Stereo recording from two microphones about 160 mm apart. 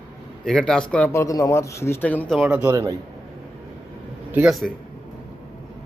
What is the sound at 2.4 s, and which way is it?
Speech, 10° right (ahead or behind).